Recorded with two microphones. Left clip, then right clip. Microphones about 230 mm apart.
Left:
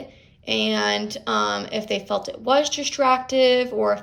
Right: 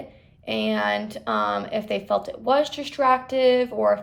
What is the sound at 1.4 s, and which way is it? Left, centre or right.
Speech, left.